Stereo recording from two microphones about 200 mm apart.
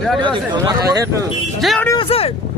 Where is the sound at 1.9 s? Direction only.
25° left (ahead or behind).